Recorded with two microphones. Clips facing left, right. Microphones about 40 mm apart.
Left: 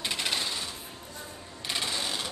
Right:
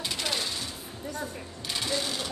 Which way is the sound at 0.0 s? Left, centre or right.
Centre.